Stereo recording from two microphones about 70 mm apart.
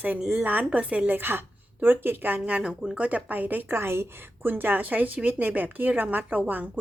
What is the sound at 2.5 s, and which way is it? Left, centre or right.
A woman's voice, centre.